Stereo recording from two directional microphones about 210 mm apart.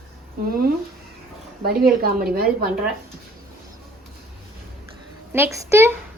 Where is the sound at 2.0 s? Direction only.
45° right (ahead or behind).